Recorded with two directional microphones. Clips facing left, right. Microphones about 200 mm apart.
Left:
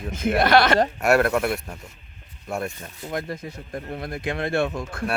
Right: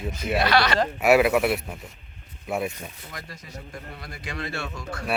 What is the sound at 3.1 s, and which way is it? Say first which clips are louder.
Speech: left 11 dB; 55° left (ahead or behind).